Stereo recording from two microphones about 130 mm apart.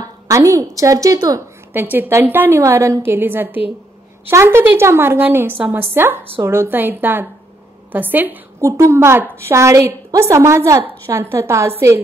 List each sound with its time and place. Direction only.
0.3 s a woman's voice: 25° right (ahead or behind)
1.7 s a woman's voice: 15° right (ahead or behind)